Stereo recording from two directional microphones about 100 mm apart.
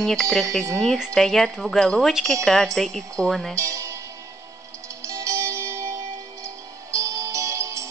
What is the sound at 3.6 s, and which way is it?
Speech, 30° right (ahead or behind).